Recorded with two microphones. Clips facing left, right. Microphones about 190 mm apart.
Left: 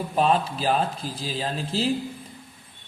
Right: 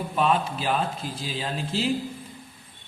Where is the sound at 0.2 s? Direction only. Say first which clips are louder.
Left 2 dB; 35° left (ahead or behind).